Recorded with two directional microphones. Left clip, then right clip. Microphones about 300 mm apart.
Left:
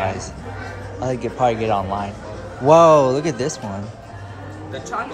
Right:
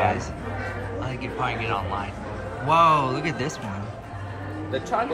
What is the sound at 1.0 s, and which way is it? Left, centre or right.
A man's voice, centre.